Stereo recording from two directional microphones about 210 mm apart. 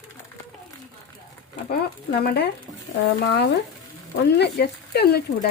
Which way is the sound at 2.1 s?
50° left (ahead or behind).